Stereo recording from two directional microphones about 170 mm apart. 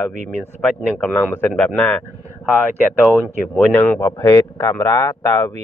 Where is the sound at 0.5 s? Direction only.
10° left (ahead or behind).